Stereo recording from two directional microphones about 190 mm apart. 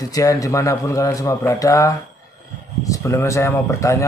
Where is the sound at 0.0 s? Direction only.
20° left (ahead or behind).